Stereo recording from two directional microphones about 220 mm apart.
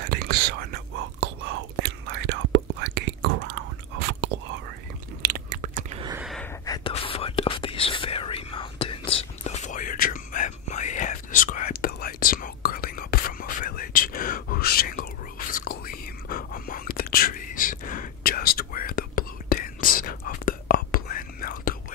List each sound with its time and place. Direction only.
0.0 s whispering: 45° right (ahead or behind)
5.2 s biting: 40° right (ahead or behind)
6.6 s whispering: 15° left (ahead or behind); by 21.7 s 40° left (ahead or behind)